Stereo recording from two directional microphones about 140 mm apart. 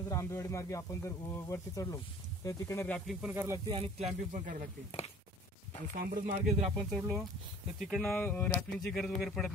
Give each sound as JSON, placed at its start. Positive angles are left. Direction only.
{"t": 0.1, "sound": "speech", "side_deg": 20}
{"t": 3.1, "sound": "speech", "side_deg": -5}
{"t": 3.3, "sound": "speech", "side_deg": -20}
{"t": 3.6, "sound": "speech", "side_deg": -45}
{"t": 4.3, "sound": "speech", "side_deg": -70}
{"t": 5.9, "sound": "speech", "side_deg": -80}
{"t": 6.4, "sound": "speech", "side_deg": 0}
{"t": 8.2, "sound": "speech", "side_deg": 10}